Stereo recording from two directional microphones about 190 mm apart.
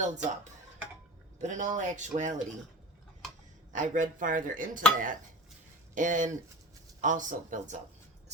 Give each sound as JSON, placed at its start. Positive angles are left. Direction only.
{"t": 0.0, "sound": "speech", "side_deg": -40}
{"t": 1.4, "sound": "speech", "side_deg": -40}
{"t": 3.7, "sound": "speech", "side_deg": -40}